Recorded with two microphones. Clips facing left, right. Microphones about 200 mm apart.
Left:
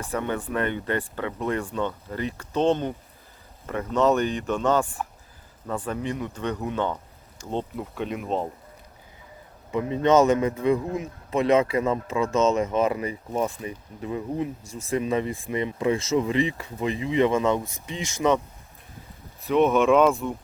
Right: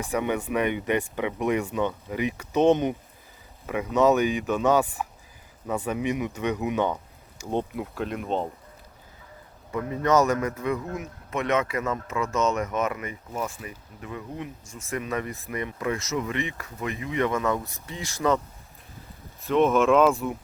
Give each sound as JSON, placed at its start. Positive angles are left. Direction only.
{"t": 0.0, "sound": "speech", "side_deg": -10}
{"t": 7.9, "sound": "speech", "side_deg": 0}
{"t": 9.7, "sound": "speech", "side_deg": 25}
{"t": 19.5, "sound": "speech", "side_deg": 0}